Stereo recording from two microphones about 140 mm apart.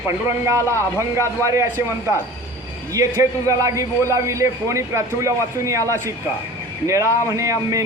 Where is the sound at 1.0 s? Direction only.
20° right (ahead or behind).